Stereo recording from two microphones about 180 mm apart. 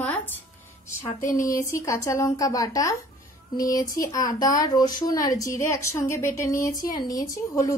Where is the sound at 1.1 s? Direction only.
45° left (ahead or behind).